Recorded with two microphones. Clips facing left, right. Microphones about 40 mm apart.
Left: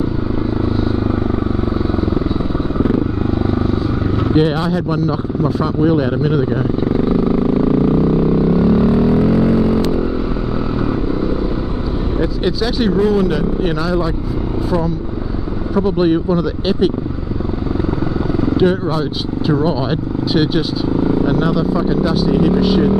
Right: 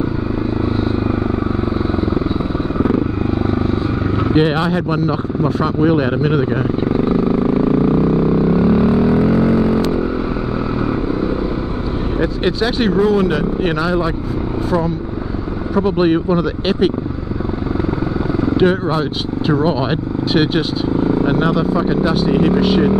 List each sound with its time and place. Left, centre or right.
4.2 s speech: right
7.5 s vehicle: centre
12.2 s speech: right
15.7 s speech: right
18.4 s speech: centre